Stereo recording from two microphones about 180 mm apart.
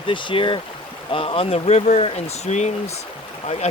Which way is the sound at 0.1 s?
25° left (ahead or behind).